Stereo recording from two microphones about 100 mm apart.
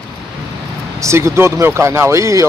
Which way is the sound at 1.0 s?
30° right (ahead or behind).